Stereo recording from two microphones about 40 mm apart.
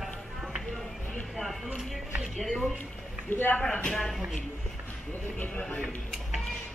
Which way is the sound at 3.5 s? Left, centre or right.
Left.